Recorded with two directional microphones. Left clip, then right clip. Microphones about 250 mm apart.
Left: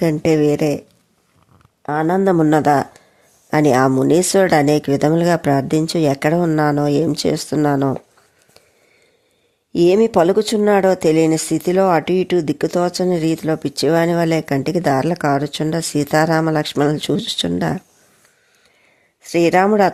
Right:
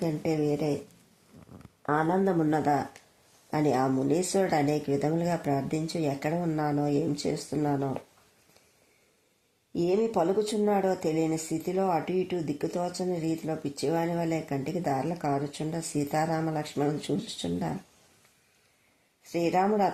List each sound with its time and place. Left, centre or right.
0.0 s speech: left
1.8 s speech: left
9.7 s speech: left
19.3 s speech: left